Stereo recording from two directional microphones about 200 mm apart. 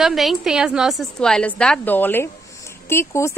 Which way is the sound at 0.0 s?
Centre (ahead or behind).